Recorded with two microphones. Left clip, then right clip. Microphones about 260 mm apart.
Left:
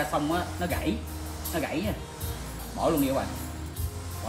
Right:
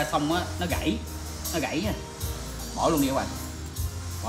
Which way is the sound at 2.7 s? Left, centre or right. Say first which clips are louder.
Right 1 dB; centre.